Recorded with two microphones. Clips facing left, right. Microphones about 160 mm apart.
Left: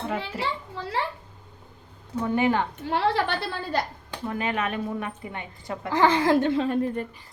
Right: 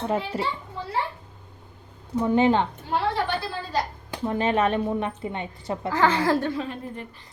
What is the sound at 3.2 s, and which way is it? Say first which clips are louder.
Speech: even; 60° left (ahead or behind).